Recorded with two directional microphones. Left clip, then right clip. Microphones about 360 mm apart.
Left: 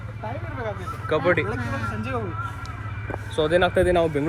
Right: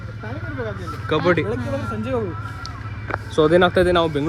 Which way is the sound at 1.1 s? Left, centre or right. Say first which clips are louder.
Right 2 dB; centre.